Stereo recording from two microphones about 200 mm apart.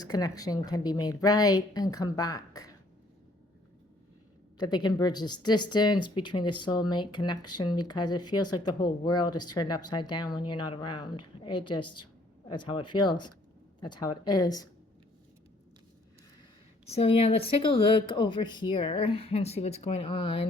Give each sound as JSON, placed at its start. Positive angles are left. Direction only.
{"t": 0.0, "sound": "speech", "side_deg": 20}
{"t": 4.5, "sound": "speech", "side_deg": 20}
{"t": 16.9, "sound": "speech", "side_deg": 30}